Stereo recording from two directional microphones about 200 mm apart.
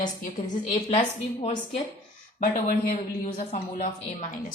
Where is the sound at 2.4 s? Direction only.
45° left (ahead or behind).